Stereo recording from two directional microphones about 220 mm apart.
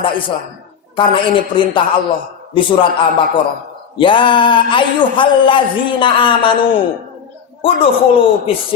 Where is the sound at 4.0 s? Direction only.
20° left (ahead or behind).